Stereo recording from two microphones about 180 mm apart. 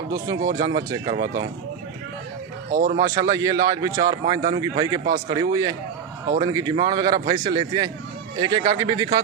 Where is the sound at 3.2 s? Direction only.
20° right (ahead or behind).